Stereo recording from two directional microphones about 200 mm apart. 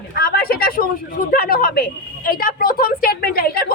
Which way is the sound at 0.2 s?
50° left (ahead or behind).